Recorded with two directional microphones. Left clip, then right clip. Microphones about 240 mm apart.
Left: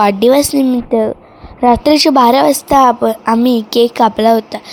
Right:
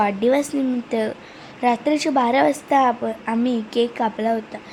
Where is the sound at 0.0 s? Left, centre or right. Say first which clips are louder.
Left 9 dB; left.